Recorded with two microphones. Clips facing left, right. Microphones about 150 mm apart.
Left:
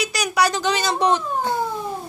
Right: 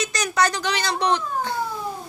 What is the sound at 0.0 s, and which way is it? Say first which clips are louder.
Speech: left 2 dB; 10° left (ahead or behind).